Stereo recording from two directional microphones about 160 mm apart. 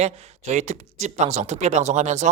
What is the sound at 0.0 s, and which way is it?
Speech, 45° right (ahead or behind).